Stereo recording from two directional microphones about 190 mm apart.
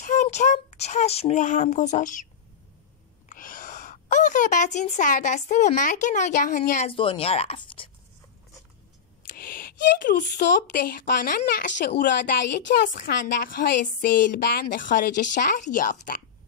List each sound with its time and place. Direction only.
0.0 s speech: 40° left (ahead or behind)
3.3 s speech: 45° left (ahead or behind); by 7.9 s 30° left (ahead or behind)
9.3 s a woman's voice: 50° left (ahead or behind)